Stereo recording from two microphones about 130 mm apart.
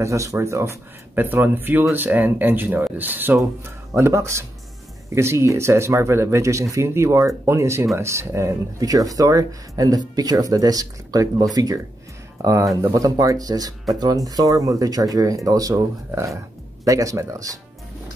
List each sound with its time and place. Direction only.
0.0 s speech: 25° right (ahead or behind)